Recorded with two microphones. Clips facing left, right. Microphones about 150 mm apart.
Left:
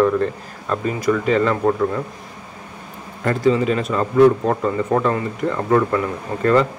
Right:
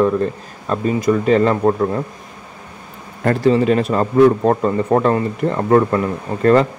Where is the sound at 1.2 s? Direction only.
40° right (ahead or behind).